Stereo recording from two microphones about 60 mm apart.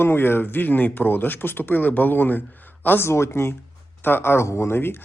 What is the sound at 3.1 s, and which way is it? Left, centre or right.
Speech, left.